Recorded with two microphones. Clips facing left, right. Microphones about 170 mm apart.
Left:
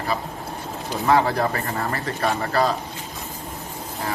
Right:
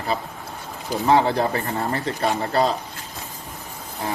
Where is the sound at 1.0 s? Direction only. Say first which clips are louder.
Right 1 dB; 30° right (ahead or behind).